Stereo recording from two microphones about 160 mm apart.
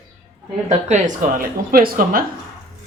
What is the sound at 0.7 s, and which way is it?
Speech, 45° right (ahead or behind).